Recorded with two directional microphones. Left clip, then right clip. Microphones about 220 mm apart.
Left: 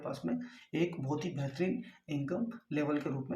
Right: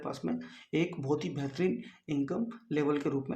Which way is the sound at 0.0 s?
45° right (ahead or behind).